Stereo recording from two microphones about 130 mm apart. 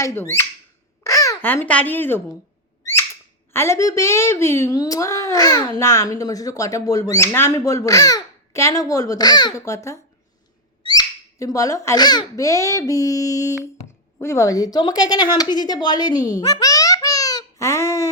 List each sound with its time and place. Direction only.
0.0 s speech: 20° left (ahead or behind)
3.5 s a child's voice: 20° left (ahead or behind)